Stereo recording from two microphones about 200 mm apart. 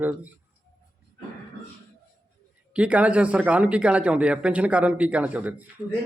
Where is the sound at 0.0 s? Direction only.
10° right (ahead or behind).